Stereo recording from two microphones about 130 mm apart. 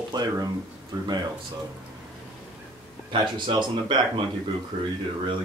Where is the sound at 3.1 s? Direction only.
40° right (ahead or behind).